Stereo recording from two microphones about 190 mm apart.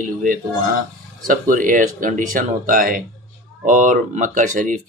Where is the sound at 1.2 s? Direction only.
45° right (ahead or behind).